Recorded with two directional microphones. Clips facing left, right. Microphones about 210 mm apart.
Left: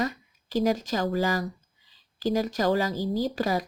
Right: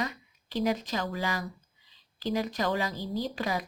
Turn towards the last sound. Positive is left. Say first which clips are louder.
# left 5 dB
turn(degrees=40)  # may be behind; listen again after turning